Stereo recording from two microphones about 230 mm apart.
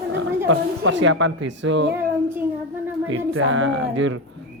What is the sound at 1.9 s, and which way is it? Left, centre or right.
Child singing, centre.